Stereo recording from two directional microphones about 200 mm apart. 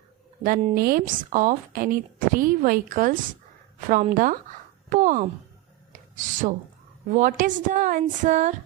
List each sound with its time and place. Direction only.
0.4 s a woman's voice: 45° right (ahead or behind)
5.9 s a sound: 40° right (ahead or behind)
7.1 s a woman's voice: 40° right (ahead or behind)